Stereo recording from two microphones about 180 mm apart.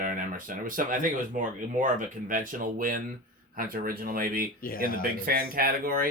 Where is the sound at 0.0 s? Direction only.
50° right (ahead or behind).